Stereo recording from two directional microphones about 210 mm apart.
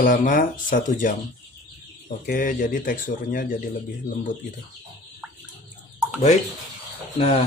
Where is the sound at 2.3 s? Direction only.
40° left (ahead or behind).